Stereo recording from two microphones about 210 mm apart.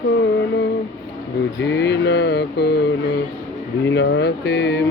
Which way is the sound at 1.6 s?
55° left (ahead or behind).